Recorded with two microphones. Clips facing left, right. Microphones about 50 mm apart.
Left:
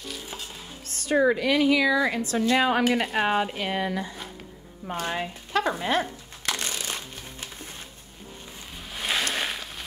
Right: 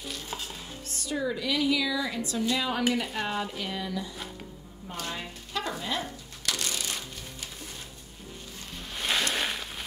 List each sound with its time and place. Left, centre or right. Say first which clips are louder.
0.1 s stir: right 1 dB; centre
0.8 s a woman's voice: left 10 dB; left
4.9 s speech: left 7 dB; left
6.4 s music: left 2 dB; left
8.9 s a sound: left 1 dB; centre